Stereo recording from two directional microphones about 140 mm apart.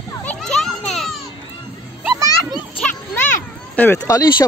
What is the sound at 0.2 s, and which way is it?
Children playing, 10° left (ahead or behind).